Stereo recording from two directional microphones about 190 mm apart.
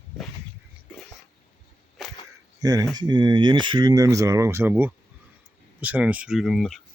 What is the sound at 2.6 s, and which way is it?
Speech, 20° right (ahead or behind).